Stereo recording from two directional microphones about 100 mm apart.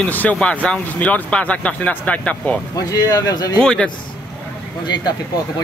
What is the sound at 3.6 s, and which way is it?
Speech, 10° left (ahead or behind).